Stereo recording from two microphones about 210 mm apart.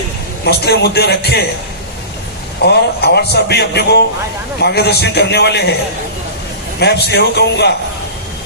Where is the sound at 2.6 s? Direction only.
50° left (ahead or behind).